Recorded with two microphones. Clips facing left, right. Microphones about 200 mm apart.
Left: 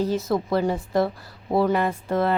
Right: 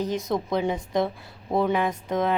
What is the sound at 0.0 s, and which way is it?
A woman's voice, 5° left (ahead or behind).